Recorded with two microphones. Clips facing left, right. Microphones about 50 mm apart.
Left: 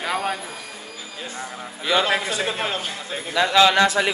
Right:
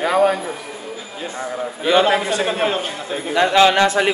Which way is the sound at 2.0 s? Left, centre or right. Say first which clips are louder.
Right 5 dB; centre.